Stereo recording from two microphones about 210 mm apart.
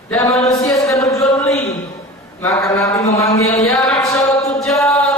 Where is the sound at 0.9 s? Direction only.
15° left (ahead or behind).